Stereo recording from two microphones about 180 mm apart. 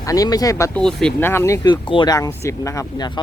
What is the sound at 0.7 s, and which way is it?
Speech, 5° left (ahead or behind).